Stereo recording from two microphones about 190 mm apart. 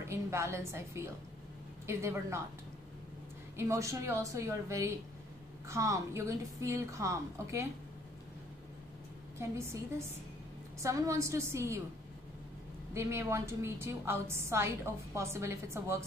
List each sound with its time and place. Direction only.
0.0 s a woman's voice: 15° right (ahead or behind)
3.5 s a woman's voice: 15° right (ahead or behind)
9.4 s a woman's voice: 15° right (ahead or behind)
12.9 s a woman's voice: 15° right (ahead or behind)